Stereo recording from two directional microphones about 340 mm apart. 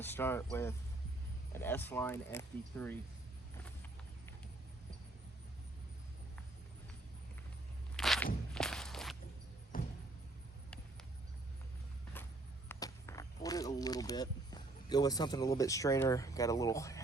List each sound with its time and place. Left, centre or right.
0.0 s speech: centre
1.5 s speech: centre
7.9 s walk: centre
9.7 s vehicle: left
12.2 s vehicle: centre
12.6 s walk: centre